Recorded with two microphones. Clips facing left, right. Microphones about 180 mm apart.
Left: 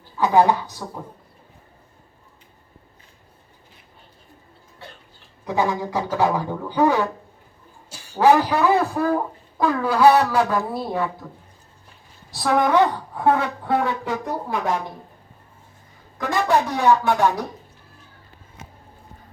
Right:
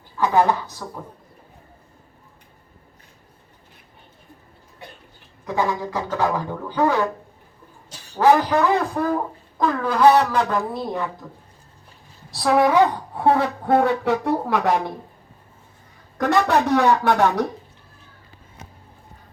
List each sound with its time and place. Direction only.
0.2 s speech: 15° left (ahead or behind)
5.5 s a man's voice: 15° left (ahead or behind)
11.2 s speech: 10° right (ahead or behind)
12.3 s a woman's voice: centre (ahead or behind)
13.1 s speech: 30° right (ahead or behind)
13.7 s speech: 55° right (ahead or behind); by 14.8 s 80° right
16.1 s speech: 65° right (ahead or behind)